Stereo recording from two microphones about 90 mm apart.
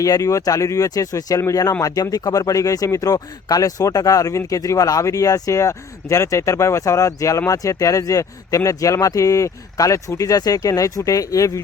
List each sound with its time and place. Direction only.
0.0 s speech: 40° left (ahead or behind)